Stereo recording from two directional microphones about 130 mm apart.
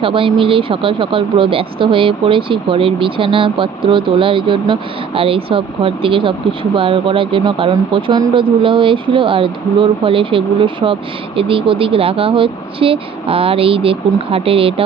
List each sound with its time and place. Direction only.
0.0 s speech: 40° right (ahead or behind)